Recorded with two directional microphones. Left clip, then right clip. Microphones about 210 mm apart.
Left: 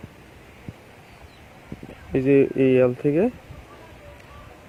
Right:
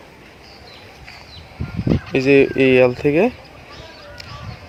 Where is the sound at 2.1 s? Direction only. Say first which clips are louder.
Right 5 dB; 10° right (ahead or behind).